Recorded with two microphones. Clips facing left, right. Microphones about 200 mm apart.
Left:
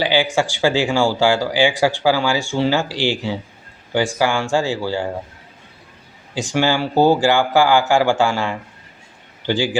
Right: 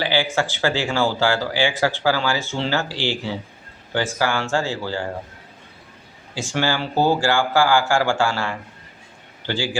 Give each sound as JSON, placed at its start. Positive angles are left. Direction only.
{"t": 0.0, "sound": "speech", "side_deg": 15}
{"t": 6.3, "sound": "speech", "side_deg": 15}